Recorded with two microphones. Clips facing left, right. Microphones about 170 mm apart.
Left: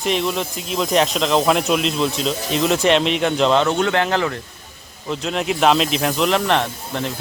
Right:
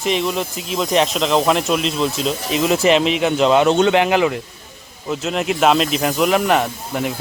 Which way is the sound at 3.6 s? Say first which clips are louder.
Right 4 dB; 20° right (ahead or behind).